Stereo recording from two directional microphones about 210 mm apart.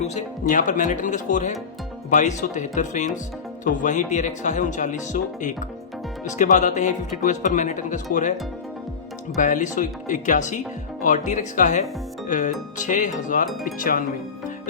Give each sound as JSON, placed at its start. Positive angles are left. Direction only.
{"t": 0.0, "sound": "speech", "side_deg": 35}
{"t": 9.4, "sound": "speech", "side_deg": 40}